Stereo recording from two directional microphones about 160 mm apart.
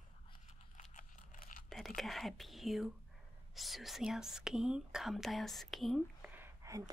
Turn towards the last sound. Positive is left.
turn(degrees=-20)  # may be behind; listen again after turning